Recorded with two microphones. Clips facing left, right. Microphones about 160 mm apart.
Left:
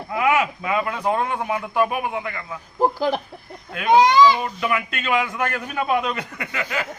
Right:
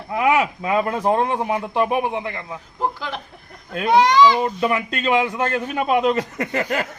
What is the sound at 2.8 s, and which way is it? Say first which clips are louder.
Speech: left 6 dB; 40° left (ahead or behind).